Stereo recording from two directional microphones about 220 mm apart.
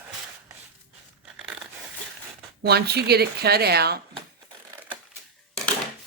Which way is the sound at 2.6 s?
45° right (ahead or behind).